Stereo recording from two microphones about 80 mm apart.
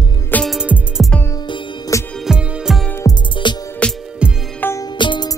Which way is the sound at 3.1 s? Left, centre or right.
Left.